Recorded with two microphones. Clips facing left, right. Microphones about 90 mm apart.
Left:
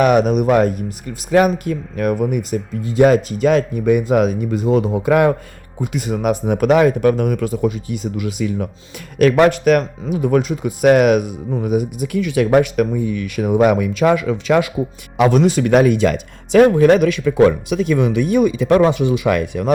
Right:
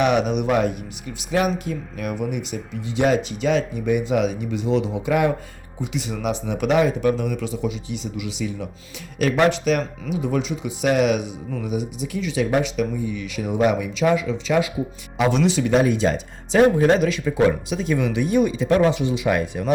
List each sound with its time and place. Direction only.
0.0 s speech: 45° left (ahead or behind)
15.2 s speech: 50° left (ahead or behind)